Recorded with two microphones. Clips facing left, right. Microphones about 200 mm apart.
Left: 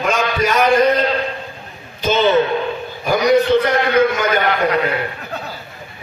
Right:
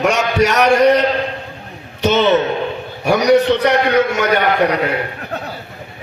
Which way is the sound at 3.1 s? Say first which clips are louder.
Right 1 dB; 75° right (ahead or behind).